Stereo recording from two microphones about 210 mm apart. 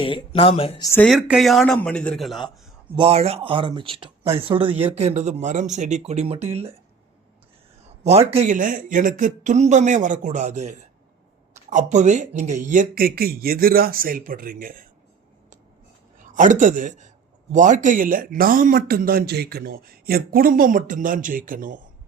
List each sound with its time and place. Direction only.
0.0 s speech: 25° left (ahead or behind)
0.9 s speech: 10° left (ahead or behind)
2.9 s speech: 25° right (ahead or behind)
8.3 s speech: 35° right (ahead or behind)
16.3 s speech: 35° right (ahead or behind)